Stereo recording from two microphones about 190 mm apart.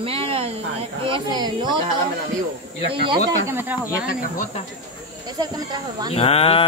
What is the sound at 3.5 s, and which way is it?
Speech, 10° right (ahead or behind).